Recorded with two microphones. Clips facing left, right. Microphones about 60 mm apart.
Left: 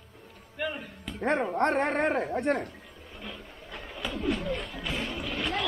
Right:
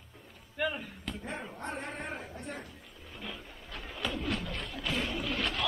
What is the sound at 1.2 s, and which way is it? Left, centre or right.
Speech, left.